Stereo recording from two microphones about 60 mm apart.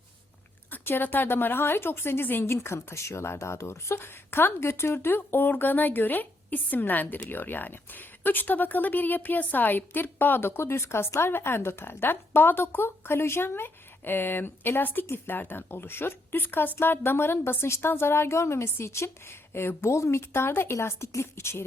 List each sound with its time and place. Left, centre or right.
0.7 s speech: left
2.5 s a woman's voice: left